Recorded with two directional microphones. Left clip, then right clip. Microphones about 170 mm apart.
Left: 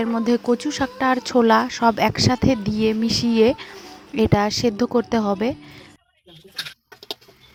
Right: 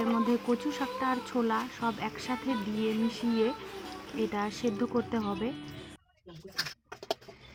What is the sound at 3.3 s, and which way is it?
A woman's voice, 65° left (ahead or behind).